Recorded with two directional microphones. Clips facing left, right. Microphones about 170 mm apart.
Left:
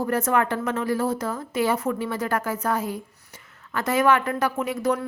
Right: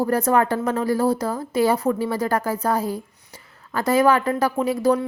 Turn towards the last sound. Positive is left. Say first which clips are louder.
# right 5 dB
turn(degrees=-30)  # may be behind; listen again after turning